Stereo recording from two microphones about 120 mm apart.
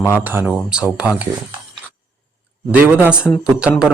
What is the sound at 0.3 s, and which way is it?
Speech, 15° right (ahead or behind).